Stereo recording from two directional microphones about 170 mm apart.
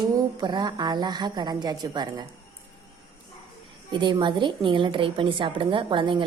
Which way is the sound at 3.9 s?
25° right (ahead or behind).